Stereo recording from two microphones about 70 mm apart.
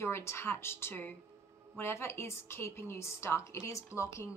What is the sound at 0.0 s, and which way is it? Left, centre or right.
A woman's voice, left.